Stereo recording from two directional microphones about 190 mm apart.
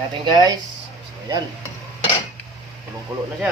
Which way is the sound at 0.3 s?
20° right (ahead or behind).